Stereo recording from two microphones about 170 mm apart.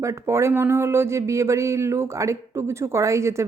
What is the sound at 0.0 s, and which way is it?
A woman's voice, 15° right (ahead or behind).